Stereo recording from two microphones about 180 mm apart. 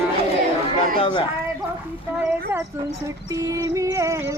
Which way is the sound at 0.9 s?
30° left (ahead or behind).